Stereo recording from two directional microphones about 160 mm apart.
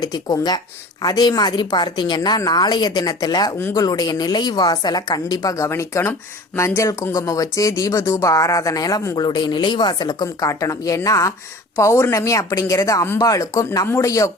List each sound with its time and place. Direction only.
0.0 s a woman's voice: 25° left (ahead or behind)